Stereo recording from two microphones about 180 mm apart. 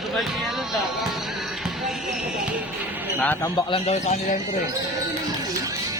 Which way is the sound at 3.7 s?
35° left (ahead or behind).